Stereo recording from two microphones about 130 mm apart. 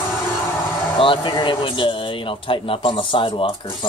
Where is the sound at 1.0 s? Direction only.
40° left (ahead or behind).